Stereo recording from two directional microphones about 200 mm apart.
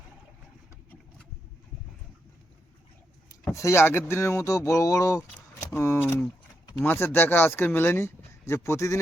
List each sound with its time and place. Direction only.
3.5 s speech: 15° left (ahead or behind)